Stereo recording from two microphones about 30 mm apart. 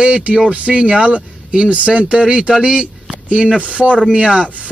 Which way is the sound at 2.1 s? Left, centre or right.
Right.